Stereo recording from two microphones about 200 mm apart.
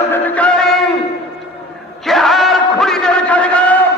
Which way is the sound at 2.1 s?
Centre (ahead or behind).